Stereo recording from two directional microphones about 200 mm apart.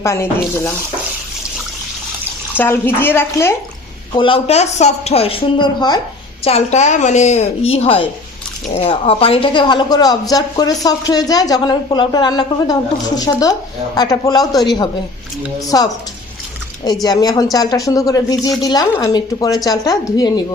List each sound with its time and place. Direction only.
0.0 s a woman's voice: 15° left (ahead or behind)
2.6 s a woman's voice: 10° left (ahead or behind)
4.1 s a woman's voice: 25° left (ahead or behind)
6.4 s a woman's voice: 35° left (ahead or behind)